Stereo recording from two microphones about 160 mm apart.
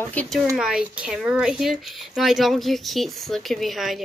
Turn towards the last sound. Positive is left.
turn(degrees=0)  # may be behind; listen again after turning